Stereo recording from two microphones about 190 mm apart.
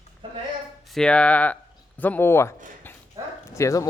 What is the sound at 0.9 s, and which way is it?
Speech, 5° left (ahead or behind).